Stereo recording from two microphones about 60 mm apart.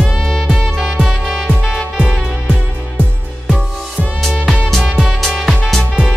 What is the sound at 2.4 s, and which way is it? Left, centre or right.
Music, right.